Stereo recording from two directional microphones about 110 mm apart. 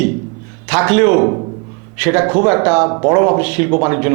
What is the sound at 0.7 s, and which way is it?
A man's voice, 15° right (ahead or behind).